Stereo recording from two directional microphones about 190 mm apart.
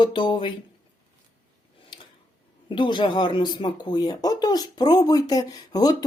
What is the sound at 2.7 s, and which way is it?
A woman's voice, 25° left (ahead or behind).